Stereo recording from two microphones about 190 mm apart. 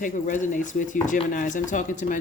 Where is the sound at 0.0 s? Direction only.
45° left (ahead or behind).